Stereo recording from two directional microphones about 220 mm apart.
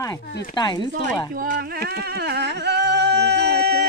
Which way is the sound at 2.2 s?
50° right (ahead or behind).